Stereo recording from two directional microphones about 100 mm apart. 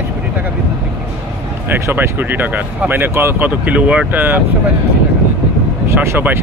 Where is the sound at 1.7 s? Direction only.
20° right (ahead or behind).